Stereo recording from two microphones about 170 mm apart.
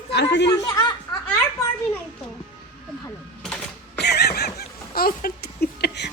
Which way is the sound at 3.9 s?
75° left (ahead or behind).